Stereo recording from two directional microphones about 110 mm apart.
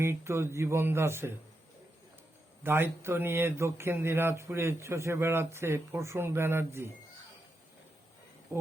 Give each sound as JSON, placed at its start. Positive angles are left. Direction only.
{"t": 0.0, "sound": "speech", "side_deg": -25}
{"t": 2.6, "sound": "speech", "side_deg": -20}